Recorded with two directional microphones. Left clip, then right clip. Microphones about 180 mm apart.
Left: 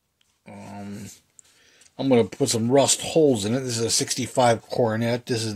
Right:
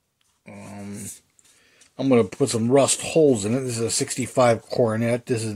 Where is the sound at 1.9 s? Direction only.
10° right (ahead or behind).